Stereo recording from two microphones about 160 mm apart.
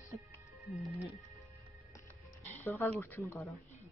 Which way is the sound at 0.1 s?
Centre (ahead or behind).